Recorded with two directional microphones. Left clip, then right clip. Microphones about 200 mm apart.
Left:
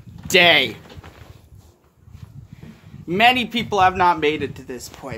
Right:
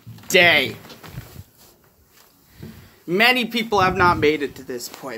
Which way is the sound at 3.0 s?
Centre (ahead or behind).